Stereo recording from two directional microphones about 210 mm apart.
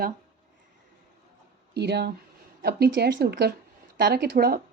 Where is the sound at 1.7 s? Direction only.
50° right (ahead or behind).